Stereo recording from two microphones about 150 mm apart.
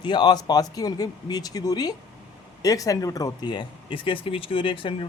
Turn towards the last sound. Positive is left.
turn(degrees=35)  # may be behind; listen again after turning